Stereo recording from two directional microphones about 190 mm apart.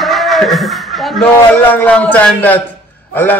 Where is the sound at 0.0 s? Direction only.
Centre (ahead or behind).